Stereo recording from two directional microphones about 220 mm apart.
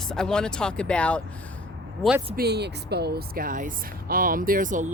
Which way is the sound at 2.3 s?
45° right (ahead or behind).